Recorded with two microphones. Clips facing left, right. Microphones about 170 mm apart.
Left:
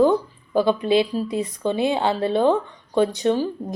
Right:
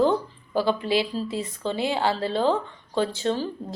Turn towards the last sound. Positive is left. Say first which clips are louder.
# left 5 dB
turn(degrees=15)  # may be behind; listen again after turning